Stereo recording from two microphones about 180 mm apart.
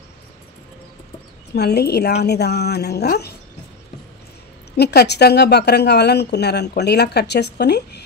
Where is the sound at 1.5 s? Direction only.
65° left (ahead or behind).